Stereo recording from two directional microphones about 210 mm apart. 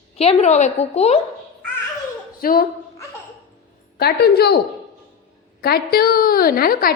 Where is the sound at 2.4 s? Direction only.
45° left (ahead or behind).